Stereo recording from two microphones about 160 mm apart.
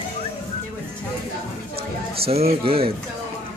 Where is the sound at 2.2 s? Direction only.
40° right (ahead or behind).